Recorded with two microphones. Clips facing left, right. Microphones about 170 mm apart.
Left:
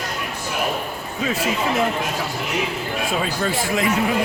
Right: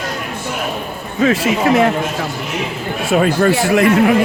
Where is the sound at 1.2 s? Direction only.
85° right.